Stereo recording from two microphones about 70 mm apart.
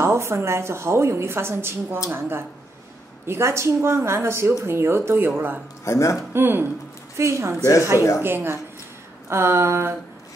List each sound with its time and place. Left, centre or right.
0.0 s a woman's voice: right
5.9 s a man's voice: left
6.3 s a woman's voice: right